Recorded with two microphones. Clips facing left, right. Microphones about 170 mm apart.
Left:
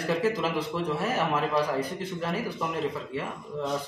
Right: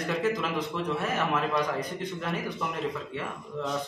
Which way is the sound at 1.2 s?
30° left (ahead or behind).